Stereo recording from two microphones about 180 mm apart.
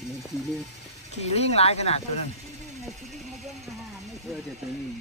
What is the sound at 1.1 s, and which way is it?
Speech, 35° left (ahead or behind).